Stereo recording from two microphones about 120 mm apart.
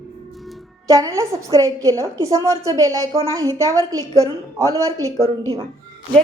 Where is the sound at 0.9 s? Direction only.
30° right (ahead or behind).